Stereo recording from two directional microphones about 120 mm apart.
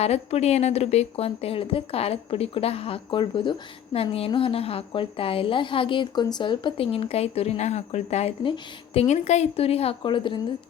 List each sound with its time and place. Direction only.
0.0 s a woman's voice: 60° left (ahead or behind); by 3.5 s 45° left (ahead or behind)
3.9 s a woman's voice: 55° left (ahead or behind)
8.4 s a woman's voice: 55° left (ahead or behind)